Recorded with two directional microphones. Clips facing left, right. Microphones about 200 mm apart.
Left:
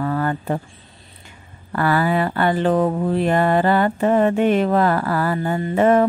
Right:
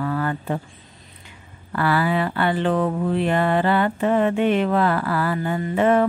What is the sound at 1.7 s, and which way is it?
Speech, 45° left (ahead or behind).